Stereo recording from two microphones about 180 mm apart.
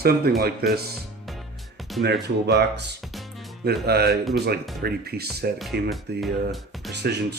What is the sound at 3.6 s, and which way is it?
Speech, 60° right (ahead or behind).